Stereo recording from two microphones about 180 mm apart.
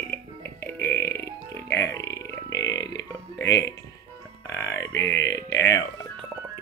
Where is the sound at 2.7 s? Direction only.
20° left (ahead or behind).